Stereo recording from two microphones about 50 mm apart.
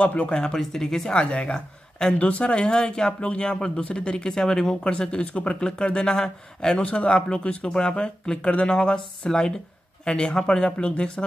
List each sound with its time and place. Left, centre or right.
0.0 s speech: left
0.4 s speech: centre
1.1 s speech: left
2.1 s speech: left
6.8 s speech: left